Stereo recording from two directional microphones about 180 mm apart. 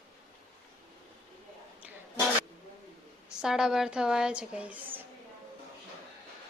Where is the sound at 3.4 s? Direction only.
5° right (ahead or behind).